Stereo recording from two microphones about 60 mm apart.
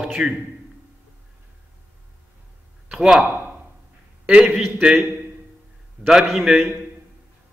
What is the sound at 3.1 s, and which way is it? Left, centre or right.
Speech, right.